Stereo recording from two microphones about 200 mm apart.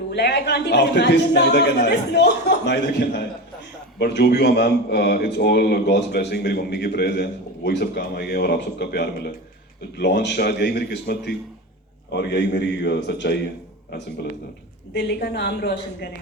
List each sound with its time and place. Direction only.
0.1 s a man's voice: 55° left (ahead or behind)
14.9 s a man's voice: 55° left (ahead or behind)